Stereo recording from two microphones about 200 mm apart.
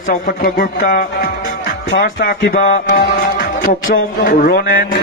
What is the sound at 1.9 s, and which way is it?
Music, 50° left (ahead or behind).